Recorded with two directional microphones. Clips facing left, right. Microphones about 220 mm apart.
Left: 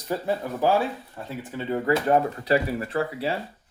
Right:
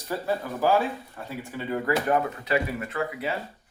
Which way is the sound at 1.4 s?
20° left (ahead or behind).